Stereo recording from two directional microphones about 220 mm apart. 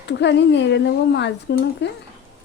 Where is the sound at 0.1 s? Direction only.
50° left (ahead or behind).